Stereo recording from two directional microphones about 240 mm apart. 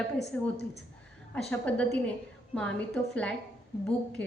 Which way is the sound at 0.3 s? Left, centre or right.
Centre.